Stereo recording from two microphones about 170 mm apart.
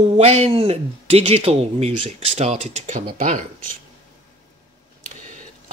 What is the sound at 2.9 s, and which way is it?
Speech, 50° right (ahead or behind).